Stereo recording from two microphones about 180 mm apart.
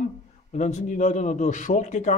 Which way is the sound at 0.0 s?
45° left (ahead or behind).